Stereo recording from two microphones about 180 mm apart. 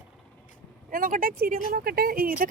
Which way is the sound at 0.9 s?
50° right (ahead or behind).